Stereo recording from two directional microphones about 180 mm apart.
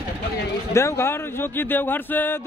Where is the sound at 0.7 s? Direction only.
15° left (ahead or behind).